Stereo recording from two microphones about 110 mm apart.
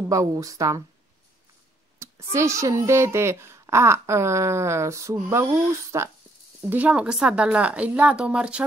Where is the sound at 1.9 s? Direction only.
25° right (ahead or behind).